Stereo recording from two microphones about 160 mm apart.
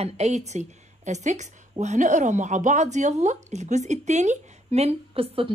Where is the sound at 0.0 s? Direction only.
45° right (ahead or behind).